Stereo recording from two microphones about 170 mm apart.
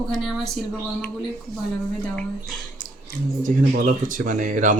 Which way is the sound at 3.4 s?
50° right (ahead or behind).